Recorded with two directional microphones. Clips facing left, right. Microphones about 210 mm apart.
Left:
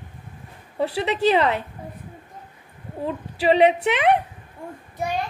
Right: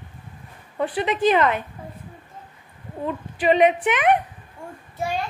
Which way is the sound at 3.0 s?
30° left (ahead or behind).